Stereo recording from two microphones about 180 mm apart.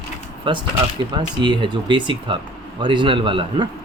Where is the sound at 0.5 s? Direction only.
30° right (ahead or behind).